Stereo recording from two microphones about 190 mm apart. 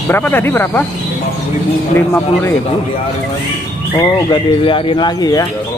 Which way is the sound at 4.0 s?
25° left (ahead or behind).